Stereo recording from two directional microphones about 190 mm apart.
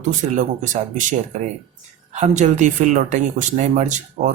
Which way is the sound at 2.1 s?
40° right (ahead or behind).